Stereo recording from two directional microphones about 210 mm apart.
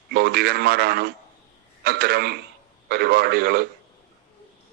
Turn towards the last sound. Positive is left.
turn(degrees=-50)  # may be behind; listen again after turning